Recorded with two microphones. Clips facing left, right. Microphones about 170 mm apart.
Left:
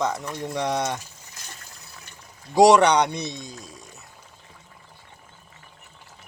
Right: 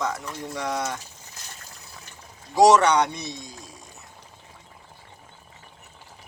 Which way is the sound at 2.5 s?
15° left (ahead or behind).